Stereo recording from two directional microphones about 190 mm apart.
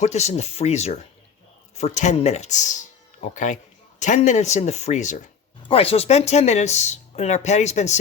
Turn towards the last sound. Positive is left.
turn(degrees=35)  # may be behind; listen again after turning